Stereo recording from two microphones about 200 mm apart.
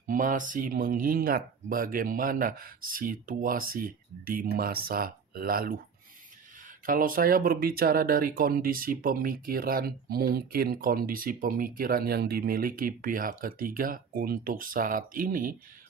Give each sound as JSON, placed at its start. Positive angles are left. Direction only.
{"t": 0.1, "sound": "speech", "side_deg": -40}
{"t": 6.8, "sound": "speech", "side_deg": -45}